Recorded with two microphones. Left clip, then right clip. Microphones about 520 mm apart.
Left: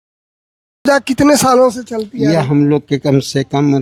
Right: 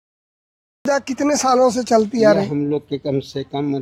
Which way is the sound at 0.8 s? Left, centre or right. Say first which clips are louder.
Left 8 dB; centre.